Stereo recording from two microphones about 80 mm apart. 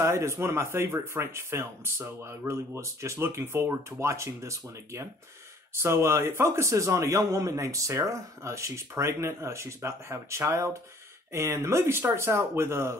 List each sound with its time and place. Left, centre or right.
0.0 s a man's voice: right